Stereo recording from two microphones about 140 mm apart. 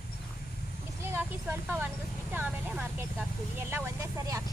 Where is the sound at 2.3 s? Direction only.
10° right (ahead or behind).